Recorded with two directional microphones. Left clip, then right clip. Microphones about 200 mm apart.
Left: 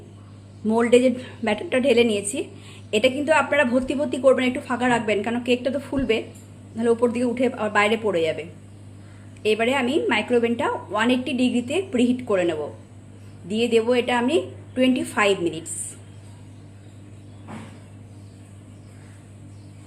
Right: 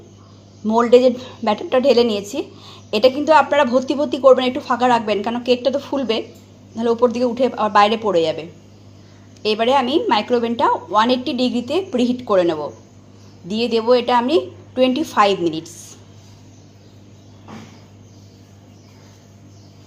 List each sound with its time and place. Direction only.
0.7 s a woman's voice: 10° right (ahead or behind)
9.4 s a woman's voice: 20° right (ahead or behind)
13.5 s a woman's voice: 15° right (ahead or behind)